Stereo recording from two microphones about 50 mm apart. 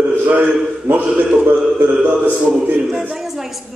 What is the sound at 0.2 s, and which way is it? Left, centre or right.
Speech, right.